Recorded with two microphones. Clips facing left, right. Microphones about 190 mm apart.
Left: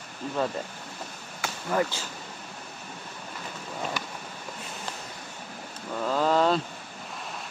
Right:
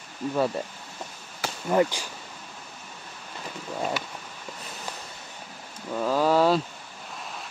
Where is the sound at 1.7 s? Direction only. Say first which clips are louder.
Right 5 dB; 15° right (ahead or behind).